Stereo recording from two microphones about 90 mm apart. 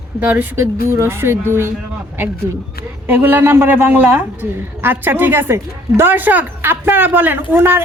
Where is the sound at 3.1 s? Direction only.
25° right (ahead or behind).